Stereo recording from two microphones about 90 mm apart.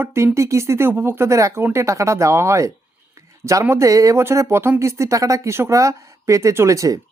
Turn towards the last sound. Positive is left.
turn(degrees=-35)  # may be behind; listen again after turning